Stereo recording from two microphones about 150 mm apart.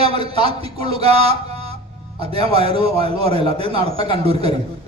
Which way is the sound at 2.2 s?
40° right (ahead or behind).